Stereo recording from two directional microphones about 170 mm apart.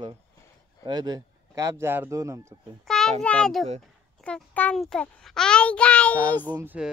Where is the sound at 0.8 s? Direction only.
25° right (ahead or behind).